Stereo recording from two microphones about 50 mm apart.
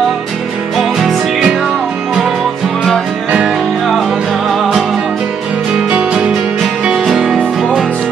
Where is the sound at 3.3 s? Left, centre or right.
Centre.